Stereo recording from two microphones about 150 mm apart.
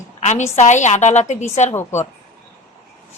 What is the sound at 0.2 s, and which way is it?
A woman's voice, 50° left (ahead or behind).